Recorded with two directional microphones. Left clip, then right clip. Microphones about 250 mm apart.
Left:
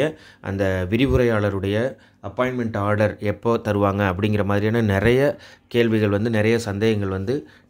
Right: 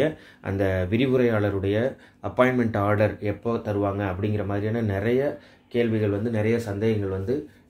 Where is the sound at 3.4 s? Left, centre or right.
Left.